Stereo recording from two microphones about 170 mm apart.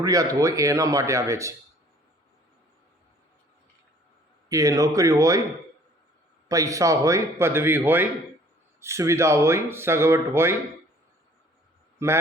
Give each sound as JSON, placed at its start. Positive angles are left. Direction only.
{"t": 0.0, "sound": "speech", "side_deg": -20}
{"t": 4.4, "sound": "speech", "side_deg": -20}
{"t": 6.5, "sound": "speech", "side_deg": -20}
{"t": 12.0, "sound": "speech", "side_deg": -15}